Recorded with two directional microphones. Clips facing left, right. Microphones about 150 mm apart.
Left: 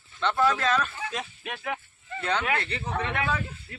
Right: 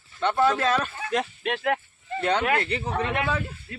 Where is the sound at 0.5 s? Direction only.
30° right (ahead or behind).